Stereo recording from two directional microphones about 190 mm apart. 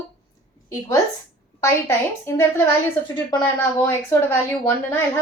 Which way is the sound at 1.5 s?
15° left (ahead or behind).